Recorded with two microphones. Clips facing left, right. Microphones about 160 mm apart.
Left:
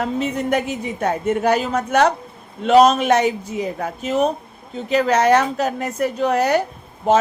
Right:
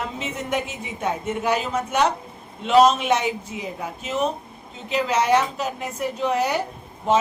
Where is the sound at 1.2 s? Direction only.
45° left (ahead or behind).